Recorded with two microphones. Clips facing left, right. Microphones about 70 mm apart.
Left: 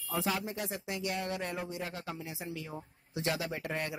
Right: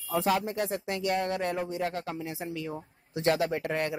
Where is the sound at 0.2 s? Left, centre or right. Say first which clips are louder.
Right 7 dB; right.